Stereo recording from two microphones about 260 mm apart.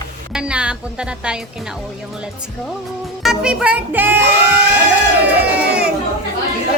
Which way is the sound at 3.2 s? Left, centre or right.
Centre.